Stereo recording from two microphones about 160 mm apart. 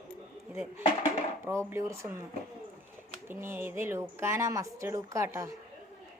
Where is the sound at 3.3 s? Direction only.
15° right (ahead or behind).